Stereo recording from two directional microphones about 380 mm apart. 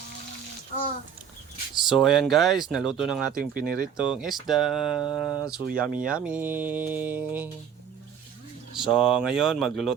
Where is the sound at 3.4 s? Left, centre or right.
Right.